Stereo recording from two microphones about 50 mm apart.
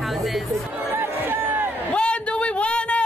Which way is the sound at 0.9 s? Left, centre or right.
Right.